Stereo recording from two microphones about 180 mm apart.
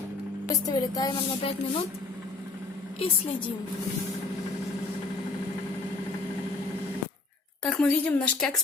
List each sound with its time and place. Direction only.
0.4 s music: 20° left (ahead or behind)
7.6 s speech: 5° left (ahead or behind)